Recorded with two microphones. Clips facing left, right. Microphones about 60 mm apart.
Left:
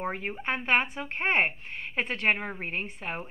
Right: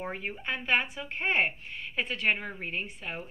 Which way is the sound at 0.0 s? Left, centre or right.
Left.